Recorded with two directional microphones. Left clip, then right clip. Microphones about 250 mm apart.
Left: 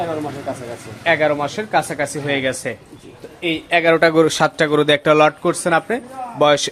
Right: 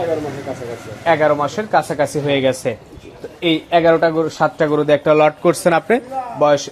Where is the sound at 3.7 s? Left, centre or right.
Centre.